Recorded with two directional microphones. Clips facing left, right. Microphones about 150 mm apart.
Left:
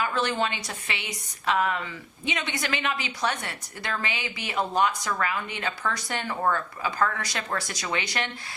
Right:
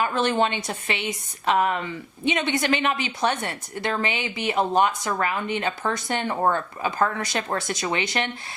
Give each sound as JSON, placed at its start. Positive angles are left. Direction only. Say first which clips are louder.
{"t": 0.0, "sound": "a woman's voice", "louder": "right 4 dB", "side_deg": -25}